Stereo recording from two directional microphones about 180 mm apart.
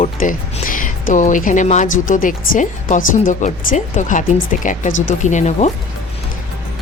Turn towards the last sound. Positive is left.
turn(degrees=40)  # may be behind; listen again after turning